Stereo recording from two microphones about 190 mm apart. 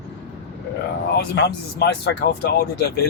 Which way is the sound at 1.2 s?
60° left (ahead or behind).